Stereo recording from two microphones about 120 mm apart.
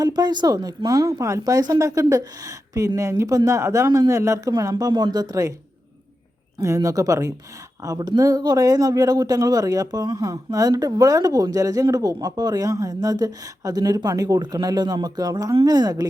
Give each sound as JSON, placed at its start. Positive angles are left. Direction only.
{"t": 0.0, "sound": "speech", "side_deg": -35}
{"t": 6.6, "sound": "speech", "side_deg": -30}